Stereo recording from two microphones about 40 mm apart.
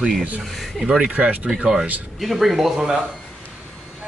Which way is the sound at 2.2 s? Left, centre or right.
Centre.